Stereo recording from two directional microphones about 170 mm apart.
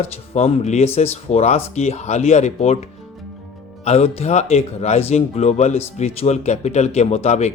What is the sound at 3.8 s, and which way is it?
Speech, 40° left (ahead or behind).